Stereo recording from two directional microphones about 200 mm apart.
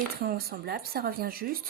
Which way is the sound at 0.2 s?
50° right (ahead or behind).